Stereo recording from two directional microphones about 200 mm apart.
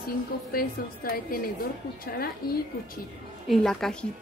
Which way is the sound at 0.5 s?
45° left (ahead or behind).